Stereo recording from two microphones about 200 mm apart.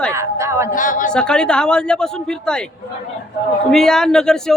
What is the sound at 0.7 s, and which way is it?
Speech, 40° left (ahead or behind).